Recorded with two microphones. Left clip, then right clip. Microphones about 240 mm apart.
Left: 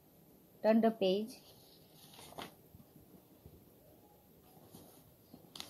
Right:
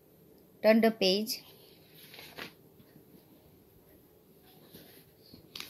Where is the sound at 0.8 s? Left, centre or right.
Right.